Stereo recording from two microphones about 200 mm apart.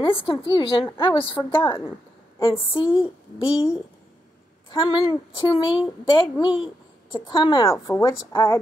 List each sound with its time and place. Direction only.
0.0 s a woman's voice: 25° left (ahead or behind)
3.4 s a woman's voice: 5° right (ahead or behind)
4.6 s a woman's voice: 20° left (ahead or behind)